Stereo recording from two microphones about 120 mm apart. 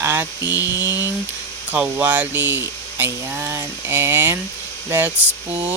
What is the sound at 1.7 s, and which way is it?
Speech, 15° right (ahead or behind).